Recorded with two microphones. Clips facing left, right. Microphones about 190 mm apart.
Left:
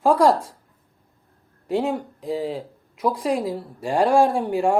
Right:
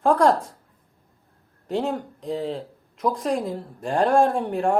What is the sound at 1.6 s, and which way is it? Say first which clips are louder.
Speech: left 2 dB; 5° left (ahead or behind).